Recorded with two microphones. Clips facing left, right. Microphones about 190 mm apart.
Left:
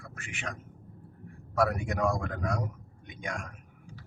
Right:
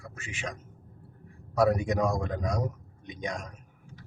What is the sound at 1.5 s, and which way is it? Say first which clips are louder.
Speech: right 4 dB; 20° right (ahead or behind).